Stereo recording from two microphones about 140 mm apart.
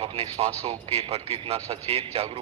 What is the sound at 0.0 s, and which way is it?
A man's voice, 45° right (ahead or behind).